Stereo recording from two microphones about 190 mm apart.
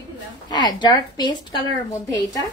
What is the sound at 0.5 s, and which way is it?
Speech, 20° left (ahead or behind).